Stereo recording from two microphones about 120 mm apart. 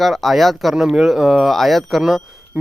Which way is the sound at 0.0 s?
Centre (ahead or behind).